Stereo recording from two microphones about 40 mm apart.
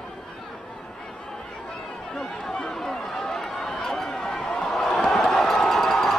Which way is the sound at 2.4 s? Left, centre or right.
Left.